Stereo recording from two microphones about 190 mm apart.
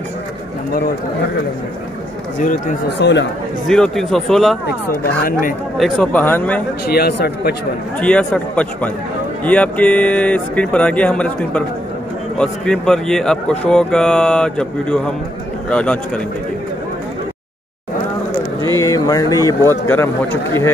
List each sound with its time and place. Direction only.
3.0 s speech: 70° left (ahead or behind)
3.6 s speech: centre (ahead or behind)
5.0 s speech: 50° left (ahead or behind)
5.8 s speech: 5° left (ahead or behind)
6.9 s speech: 55° left (ahead or behind)
8.0 s speech: 5° left (ahead or behind)
18.8 s speech: 20° left (ahead or behind)